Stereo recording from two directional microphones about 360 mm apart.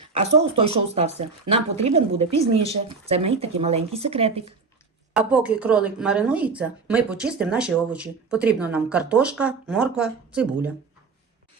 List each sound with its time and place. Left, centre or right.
0.2 s a woman's voice: centre
5.1 s a woman's voice: centre